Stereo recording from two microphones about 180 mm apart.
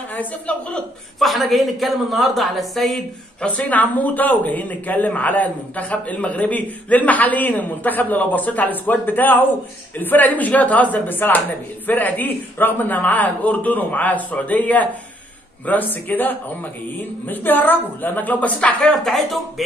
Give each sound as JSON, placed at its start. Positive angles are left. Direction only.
{"t": 0.1, "sound": "a woman's voice", "side_deg": 10}